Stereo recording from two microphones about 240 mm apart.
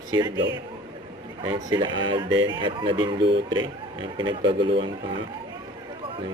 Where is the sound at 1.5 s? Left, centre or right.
Centre.